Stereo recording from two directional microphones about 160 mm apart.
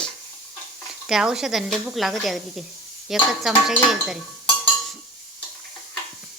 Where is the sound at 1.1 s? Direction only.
5° right (ahead or behind).